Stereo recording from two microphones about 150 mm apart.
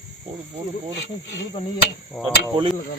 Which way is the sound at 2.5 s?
30° right (ahead or behind).